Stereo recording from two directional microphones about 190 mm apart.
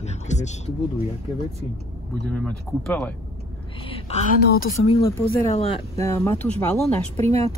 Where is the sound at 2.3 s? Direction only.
5° left (ahead or behind).